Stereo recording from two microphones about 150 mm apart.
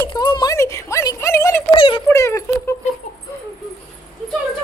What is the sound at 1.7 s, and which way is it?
Speech, 35° left (ahead or behind).